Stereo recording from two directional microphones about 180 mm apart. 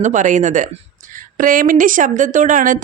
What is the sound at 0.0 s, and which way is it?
Speech, 45° right (ahead or behind).